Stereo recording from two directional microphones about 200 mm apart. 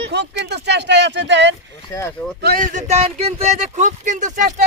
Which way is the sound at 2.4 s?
50° right (ahead or behind).